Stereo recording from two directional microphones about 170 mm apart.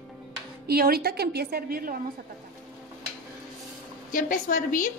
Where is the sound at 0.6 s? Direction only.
65° right (ahead or behind).